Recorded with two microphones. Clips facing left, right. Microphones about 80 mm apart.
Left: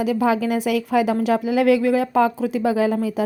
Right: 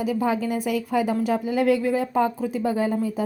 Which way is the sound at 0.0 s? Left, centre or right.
Left.